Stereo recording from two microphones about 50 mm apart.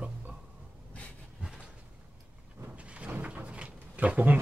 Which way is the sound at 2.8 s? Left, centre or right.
Right.